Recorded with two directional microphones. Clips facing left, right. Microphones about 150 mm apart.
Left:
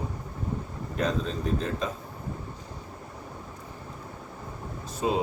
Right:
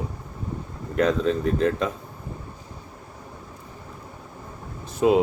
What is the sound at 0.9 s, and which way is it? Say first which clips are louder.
Speech: right 7 dB; 65° right (ahead or behind).